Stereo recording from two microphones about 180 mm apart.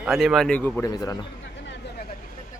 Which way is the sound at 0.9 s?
20° left (ahead or behind).